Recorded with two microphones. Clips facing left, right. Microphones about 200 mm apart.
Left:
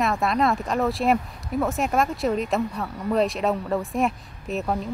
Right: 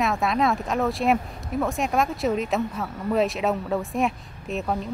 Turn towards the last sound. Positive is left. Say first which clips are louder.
# left 1 dB
turn(degrees=0)  # may be behind; listen again after turning